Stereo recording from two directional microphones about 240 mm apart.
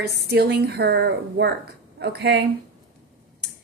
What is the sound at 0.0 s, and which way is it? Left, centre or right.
A woman's voice, right.